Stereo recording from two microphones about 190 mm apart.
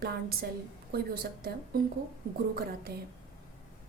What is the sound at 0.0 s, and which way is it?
A woman's voice, 55° right (ahead or behind).